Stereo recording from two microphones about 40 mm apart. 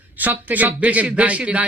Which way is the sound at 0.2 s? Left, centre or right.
Right.